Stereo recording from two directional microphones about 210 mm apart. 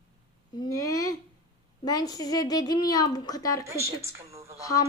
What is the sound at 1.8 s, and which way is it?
A woman's voice, 20° left (ahead or behind).